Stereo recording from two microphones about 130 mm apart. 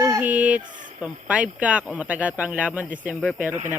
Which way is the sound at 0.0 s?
15° right (ahead or behind).